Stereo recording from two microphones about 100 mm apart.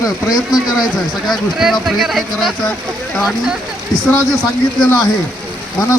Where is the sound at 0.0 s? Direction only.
40° left (ahead or behind).